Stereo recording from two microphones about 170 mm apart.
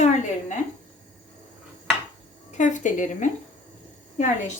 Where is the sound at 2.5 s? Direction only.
45° left (ahead or behind).